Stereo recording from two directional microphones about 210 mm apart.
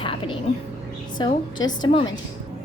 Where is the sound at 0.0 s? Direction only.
25° left (ahead or behind).